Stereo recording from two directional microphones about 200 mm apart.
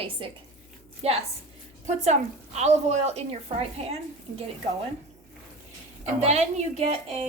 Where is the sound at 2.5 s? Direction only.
35° right (ahead or behind).